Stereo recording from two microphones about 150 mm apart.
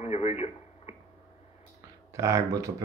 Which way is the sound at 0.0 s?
45° left (ahead or behind).